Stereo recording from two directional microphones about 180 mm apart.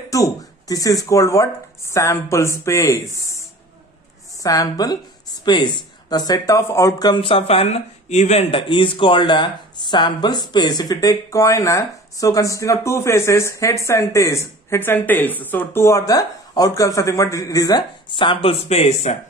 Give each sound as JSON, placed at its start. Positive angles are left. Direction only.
{"t": 0.1, "sound": "a man's voice", "side_deg": 20}